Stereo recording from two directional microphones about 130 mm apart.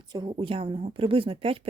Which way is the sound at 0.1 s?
35° right (ahead or behind).